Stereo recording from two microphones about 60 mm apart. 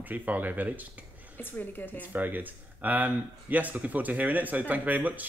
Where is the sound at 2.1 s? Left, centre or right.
Right.